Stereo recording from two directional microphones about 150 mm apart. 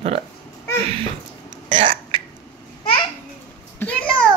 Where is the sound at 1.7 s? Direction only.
35° right (ahead or behind).